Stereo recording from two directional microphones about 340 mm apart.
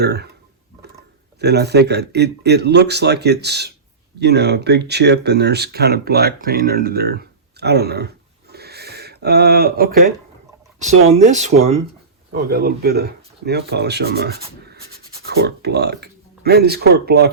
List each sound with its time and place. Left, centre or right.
0.0 s speech: right
1.4 s speech: right
8.5 s a sound: right
10.8 s speech: right
15.4 s speech: right